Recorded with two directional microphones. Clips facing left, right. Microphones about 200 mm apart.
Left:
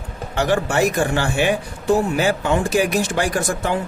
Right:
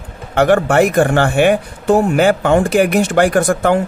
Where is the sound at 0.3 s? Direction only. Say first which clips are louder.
Right 7 dB; 60° right (ahead or behind).